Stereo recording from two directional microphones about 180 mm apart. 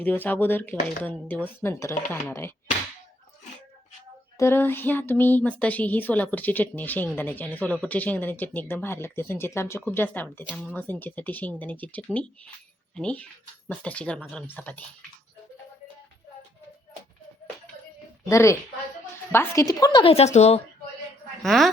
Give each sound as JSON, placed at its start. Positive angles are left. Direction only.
{"t": 0.0, "sound": "speech", "side_deg": 10}
{"t": 4.4, "sound": "speech", "side_deg": 15}
{"t": 18.3, "sound": "a woman's voice", "side_deg": 15}
{"t": 21.4, "sound": "a woman's voice", "side_deg": 0}